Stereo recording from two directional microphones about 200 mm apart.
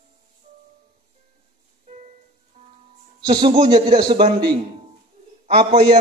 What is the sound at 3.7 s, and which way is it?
A man's voice, 20° right (ahead or behind).